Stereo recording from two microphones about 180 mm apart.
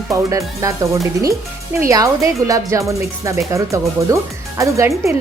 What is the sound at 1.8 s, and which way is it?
Speech, 20° right (ahead or behind).